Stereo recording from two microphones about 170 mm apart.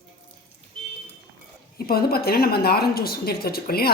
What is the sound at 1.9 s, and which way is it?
Speech, 65° left (ahead or behind).